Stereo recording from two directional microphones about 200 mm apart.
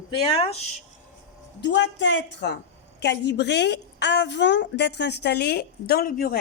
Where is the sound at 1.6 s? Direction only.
60° left (ahead or behind).